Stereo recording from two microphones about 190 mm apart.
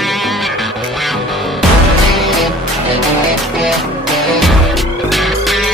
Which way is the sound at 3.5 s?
Centre (ahead or behind).